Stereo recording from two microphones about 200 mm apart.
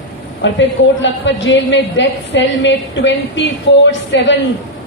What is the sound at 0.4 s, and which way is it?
A woman's voice, 65° left (ahead or behind).